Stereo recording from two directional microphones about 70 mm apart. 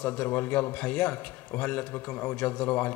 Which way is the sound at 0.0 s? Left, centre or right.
Left.